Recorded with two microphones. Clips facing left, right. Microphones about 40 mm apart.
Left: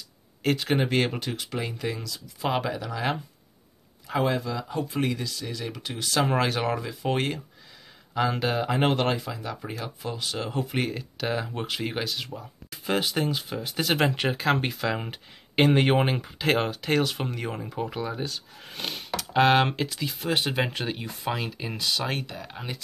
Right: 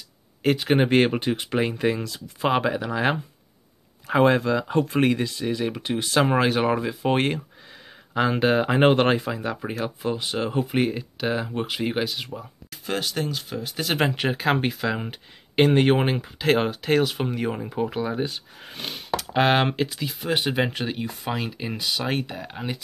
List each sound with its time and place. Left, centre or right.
0.4 s speech: centre
0.7 s speech: right
2.5 s speech: right
4.2 s speech: right
5.2 s speech: right; by 12.3 s centre
12.8 s speech: centre
18.7 s speech: centre